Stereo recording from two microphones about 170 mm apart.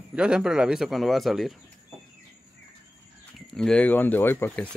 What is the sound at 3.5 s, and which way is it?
Speech, 5° left (ahead or behind).